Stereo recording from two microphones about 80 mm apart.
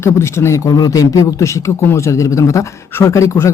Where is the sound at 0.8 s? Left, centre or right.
Left.